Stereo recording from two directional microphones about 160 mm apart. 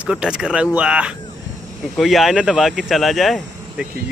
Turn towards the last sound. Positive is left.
turn(degrees=0)  # may be behind; listen again after turning